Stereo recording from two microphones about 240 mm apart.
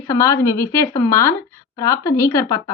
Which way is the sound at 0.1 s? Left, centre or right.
Centre.